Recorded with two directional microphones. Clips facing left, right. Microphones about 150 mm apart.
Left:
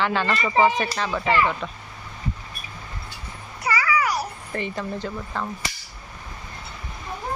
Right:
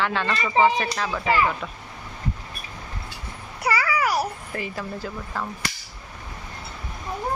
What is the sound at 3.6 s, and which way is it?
Babbling, 55° right (ahead or behind).